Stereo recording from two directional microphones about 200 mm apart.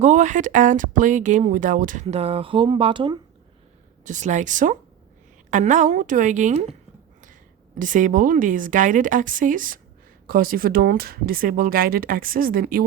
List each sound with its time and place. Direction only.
0.0 s speech: 35° right (ahead or behind)
4.0 s speech: 35° right (ahead or behind)
7.8 s speech: 40° right (ahead or behind)